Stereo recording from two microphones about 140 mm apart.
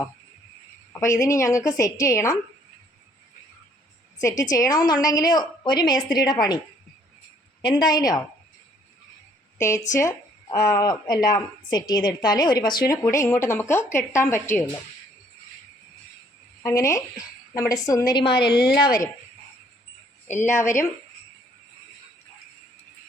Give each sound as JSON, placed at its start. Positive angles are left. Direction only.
{"t": 0.9, "sound": "a woman's voice", "side_deg": 20}
{"t": 4.2, "sound": "a woman's voice", "side_deg": 20}
{"t": 7.6, "sound": "a woman's voice", "side_deg": 30}
{"t": 9.6, "sound": "a woman's voice", "side_deg": 20}
{"t": 16.6, "sound": "a woman's voice", "side_deg": 20}
{"t": 18.5, "sound": "speech", "side_deg": -5}
{"t": 20.3, "sound": "a woman's voice", "side_deg": 60}